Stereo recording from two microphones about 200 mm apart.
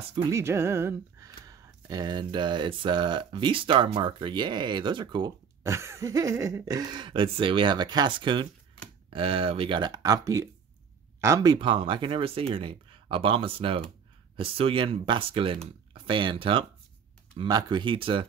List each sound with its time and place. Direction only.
0.1 s speech: 15° right (ahead or behind)